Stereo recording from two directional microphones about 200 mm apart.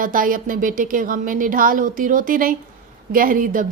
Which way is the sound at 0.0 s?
45° right (ahead or behind).